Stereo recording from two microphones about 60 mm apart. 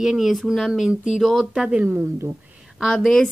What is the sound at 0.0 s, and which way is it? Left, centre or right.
Speech, centre.